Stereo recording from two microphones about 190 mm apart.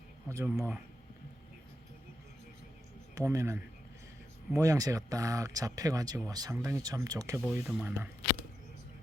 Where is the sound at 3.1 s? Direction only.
15° right (ahead or behind).